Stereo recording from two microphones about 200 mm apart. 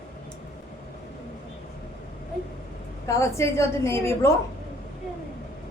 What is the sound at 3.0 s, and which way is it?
Speech, 15° left (ahead or behind).